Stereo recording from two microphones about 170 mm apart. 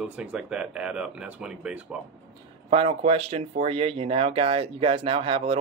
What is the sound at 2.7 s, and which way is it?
Speech, 35° right (ahead or behind).